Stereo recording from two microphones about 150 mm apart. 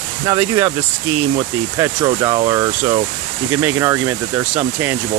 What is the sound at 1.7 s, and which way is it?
Speech, 25° right (ahead or behind).